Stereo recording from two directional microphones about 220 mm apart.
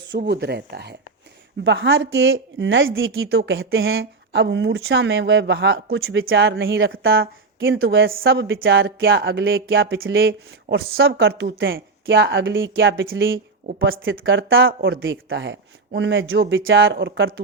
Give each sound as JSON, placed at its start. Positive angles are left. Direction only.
{"t": 0.1, "sound": "speech", "side_deg": -50}
{"t": 7.6, "sound": "speech", "side_deg": -50}